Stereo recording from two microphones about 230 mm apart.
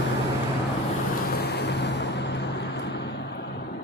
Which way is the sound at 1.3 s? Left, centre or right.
Left.